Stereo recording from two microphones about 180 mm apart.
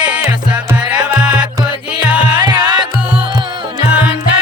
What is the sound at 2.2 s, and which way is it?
Music, 25° right (ahead or behind).